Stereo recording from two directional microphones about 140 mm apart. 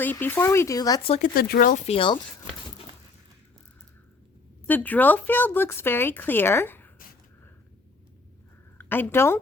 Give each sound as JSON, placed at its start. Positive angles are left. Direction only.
{"t": 0.0, "sound": "speech", "side_deg": 15}
{"t": 1.2, "sound": "speech", "side_deg": 90}
{"t": 1.8, "sound": "speech", "side_deg": 40}
{"t": 4.6, "sound": "speech", "side_deg": 10}
{"t": 8.8, "sound": "a woman's voice", "side_deg": 15}